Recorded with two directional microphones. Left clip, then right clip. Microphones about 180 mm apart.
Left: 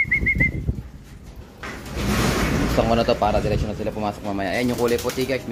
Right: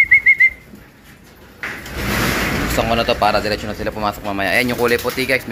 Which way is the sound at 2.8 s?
25° left (ahead or behind).